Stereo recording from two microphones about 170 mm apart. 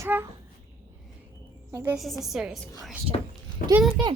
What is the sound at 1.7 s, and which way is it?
Speech, 15° right (ahead or behind).